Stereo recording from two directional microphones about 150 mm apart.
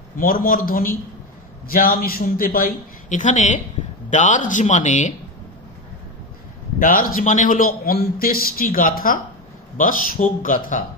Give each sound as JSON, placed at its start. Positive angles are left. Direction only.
{"t": 0.2, "sound": "a man's voice", "side_deg": 70}
{"t": 6.8, "sound": "a man's voice", "side_deg": 70}